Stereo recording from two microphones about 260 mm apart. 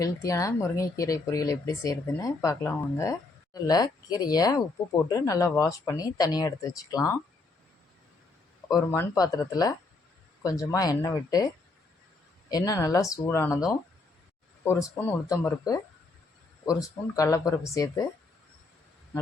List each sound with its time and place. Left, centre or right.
0.0 s speech: centre
8.6 s speech: centre
12.5 s speech: centre
14.6 s speech: centre
17.2 s speech: centre